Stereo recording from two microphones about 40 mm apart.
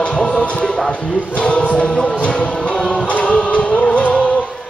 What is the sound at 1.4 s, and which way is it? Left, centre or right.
Choir, left.